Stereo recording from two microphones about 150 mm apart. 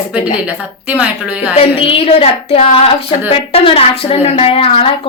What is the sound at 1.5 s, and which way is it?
A woman's voice, 40° left (ahead or behind).